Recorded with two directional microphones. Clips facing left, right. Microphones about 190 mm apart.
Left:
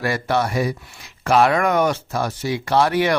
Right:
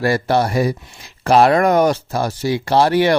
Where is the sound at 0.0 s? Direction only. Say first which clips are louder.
Right 4 dB; 35° right (ahead or behind).